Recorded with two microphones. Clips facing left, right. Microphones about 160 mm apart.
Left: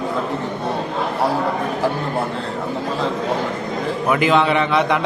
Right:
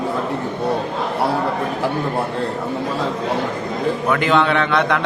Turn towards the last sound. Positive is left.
turn(degrees=5)  # may be behind; listen again after turning